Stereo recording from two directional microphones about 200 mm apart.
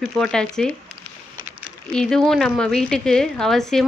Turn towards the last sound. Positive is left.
turn(degrees=0)  # may be behind; listen again after turning